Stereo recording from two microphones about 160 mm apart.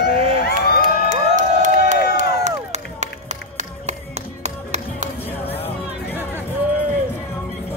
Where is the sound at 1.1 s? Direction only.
50° right (ahead or behind).